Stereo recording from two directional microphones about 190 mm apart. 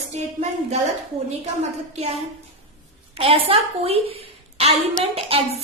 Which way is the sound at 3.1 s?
30° right (ahead or behind).